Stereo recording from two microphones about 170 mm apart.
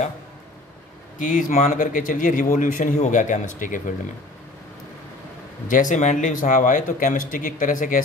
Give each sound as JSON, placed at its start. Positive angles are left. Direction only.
{"t": 1.2, "sound": "speech", "side_deg": 50}
{"t": 5.7, "sound": "speech", "side_deg": 50}